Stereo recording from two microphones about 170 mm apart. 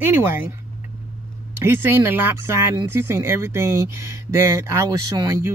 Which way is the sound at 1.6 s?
15° right (ahead or behind).